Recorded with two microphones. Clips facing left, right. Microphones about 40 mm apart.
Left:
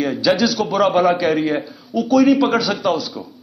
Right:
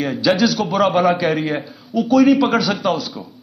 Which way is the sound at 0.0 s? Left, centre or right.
Centre.